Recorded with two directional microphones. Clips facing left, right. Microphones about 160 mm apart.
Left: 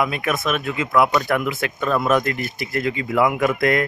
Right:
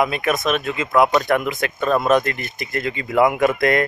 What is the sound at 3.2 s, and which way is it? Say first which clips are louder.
Speech: right 3 dB; 40° right (ahead or behind).